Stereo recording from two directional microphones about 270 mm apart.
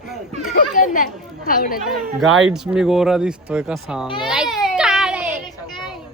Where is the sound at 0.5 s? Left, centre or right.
Left.